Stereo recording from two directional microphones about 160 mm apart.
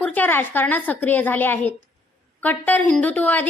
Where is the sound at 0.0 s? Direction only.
10° left (ahead or behind).